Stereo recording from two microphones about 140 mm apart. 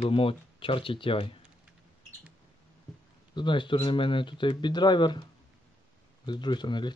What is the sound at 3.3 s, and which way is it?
Speech, 35° left (ahead or behind).